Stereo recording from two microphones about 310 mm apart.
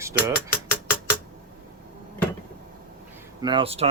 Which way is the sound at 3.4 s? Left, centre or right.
Centre.